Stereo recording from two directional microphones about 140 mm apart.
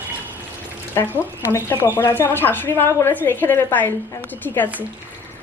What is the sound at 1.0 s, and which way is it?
A woman's voice, 20° left (ahead or behind).